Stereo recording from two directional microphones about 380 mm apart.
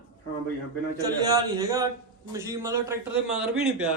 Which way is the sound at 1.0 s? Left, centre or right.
Centre.